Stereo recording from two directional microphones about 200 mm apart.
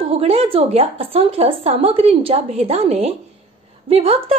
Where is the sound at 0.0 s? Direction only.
30° right (ahead or behind).